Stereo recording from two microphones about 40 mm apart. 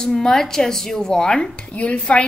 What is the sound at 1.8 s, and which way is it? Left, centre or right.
Speech, left.